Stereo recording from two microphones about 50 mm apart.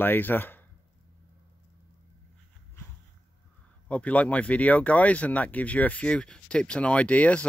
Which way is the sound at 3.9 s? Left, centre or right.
Left.